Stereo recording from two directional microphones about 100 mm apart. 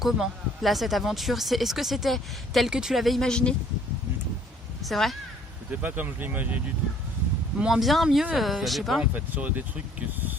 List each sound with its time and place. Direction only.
0.0 s speech: centre (ahead or behind)
4.8 s speech: centre (ahead or behind)
5.7 s speech: 15° right (ahead or behind)
7.6 s speech: centre (ahead or behind)
9.1 s speech: 15° right (ahead or behind)